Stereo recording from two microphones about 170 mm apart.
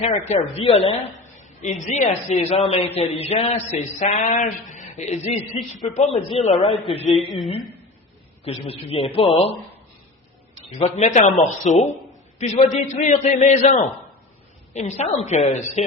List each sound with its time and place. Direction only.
0.0 s a man's voice: 40° left (ahead or behind)
8.4 s a man's voice: 35° left (ahead or behind)
10.8 s a man's voice: 40° left (ahead or behind)